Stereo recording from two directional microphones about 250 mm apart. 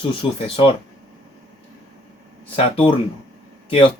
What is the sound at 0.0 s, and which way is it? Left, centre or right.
Speech, left.